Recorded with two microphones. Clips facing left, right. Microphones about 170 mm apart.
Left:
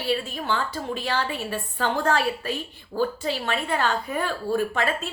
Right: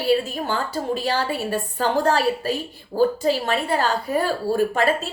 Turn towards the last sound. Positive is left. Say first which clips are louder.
# right 5 dB
turn(degrees=-40)  # may be behind; listen again after turning